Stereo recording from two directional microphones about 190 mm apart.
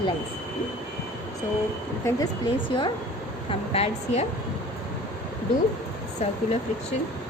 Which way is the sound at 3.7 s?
30° left (ahead or behind).